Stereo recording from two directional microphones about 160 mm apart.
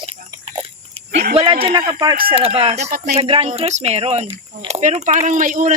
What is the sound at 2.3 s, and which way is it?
Speech, 35° right (ahead or behind).